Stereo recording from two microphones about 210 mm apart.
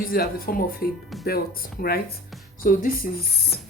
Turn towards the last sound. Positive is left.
turn(degrees=45)  # may be behind; listen again after turning